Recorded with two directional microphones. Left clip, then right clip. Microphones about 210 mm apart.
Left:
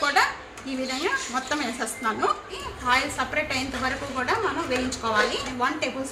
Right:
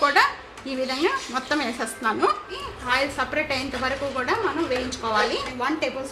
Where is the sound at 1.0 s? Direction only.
40° right (ahead or behind).